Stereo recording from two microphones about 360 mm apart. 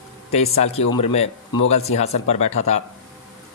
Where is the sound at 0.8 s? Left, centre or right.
Left.